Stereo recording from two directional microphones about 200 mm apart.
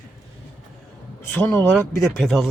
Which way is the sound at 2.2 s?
Centre (ahead or behind).